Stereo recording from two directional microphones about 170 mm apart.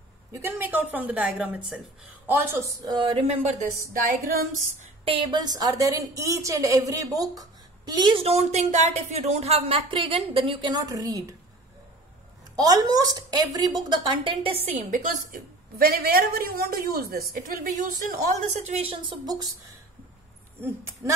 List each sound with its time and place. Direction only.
0.3 s speech: 15° right (ahead or behind)
2.8 s a woman's voice: 25° right (ahead or behind); by 3.6 s 40° right (ahead or behind)
5.0 s a woman's voice: 30° right (ahead or behind)
12.5 s a woman's voice: 20° right (ahead or behind); by 18.6 s 55° right (ahead or behind)
18.6 s a woman's voice: 40° right (ahead or behind)
21.0 s a woman's voice: 20° right (ahead or behind)